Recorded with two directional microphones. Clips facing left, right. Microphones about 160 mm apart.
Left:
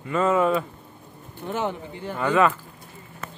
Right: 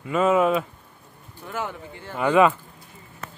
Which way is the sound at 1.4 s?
20° left (ahead or behind).